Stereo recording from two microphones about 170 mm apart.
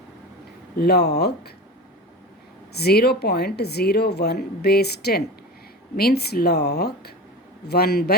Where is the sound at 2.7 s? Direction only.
70° left (ahead or behind).